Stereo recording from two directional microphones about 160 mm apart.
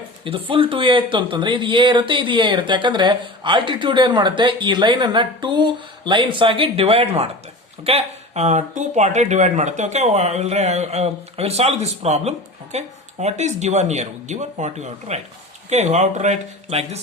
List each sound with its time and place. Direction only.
0.3 s speech: 35° right (ahead or behind)